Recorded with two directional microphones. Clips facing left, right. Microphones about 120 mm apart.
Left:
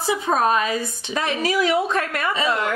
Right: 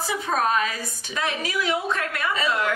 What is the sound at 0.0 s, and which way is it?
Speech, 25° left (ahead or behind).